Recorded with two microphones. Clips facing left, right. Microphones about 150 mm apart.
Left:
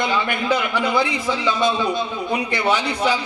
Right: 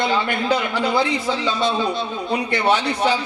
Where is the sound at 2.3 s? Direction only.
15° left (ahead or behind).